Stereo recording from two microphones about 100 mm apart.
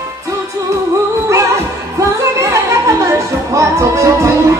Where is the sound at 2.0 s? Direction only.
30° right (ahead or behind).